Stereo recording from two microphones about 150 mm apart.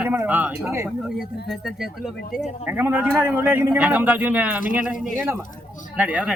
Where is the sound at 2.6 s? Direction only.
10° right (ahead or behind).